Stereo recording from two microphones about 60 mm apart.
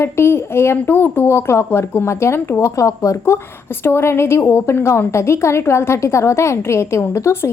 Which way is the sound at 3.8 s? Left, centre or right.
Left.